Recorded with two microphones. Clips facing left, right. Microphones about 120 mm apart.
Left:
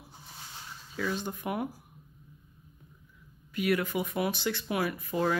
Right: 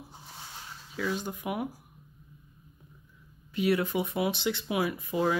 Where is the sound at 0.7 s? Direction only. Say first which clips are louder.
Right 1 dB; 5° right (ahead or behind).